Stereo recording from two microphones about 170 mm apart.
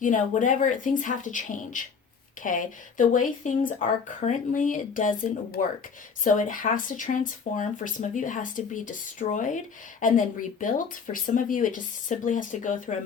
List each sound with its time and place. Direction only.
0.0 s speech: 50° left (ahead or behind)